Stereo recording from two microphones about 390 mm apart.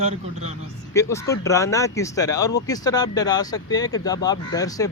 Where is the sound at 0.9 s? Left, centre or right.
Centre.